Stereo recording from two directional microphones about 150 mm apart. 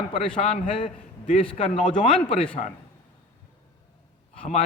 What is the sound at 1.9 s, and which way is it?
Speech, 35° left (ahead or behind).